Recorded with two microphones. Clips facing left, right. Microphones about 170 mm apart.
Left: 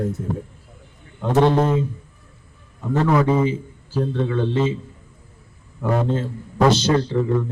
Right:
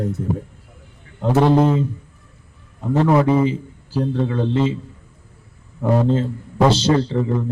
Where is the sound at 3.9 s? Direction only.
35° right (ahead or behind).